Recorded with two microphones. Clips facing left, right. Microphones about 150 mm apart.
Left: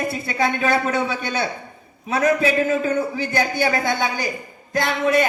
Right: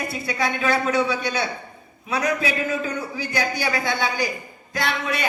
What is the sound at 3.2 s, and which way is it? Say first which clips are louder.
A woman's voice: left 4 dB; 50° left (ahead or behind).